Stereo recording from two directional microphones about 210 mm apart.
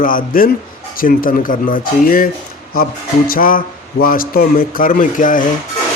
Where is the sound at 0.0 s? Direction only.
40° left (ahead or behind).